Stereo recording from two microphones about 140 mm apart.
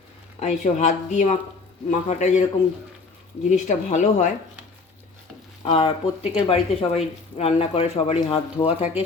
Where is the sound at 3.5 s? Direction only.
60° left (ahead or behind).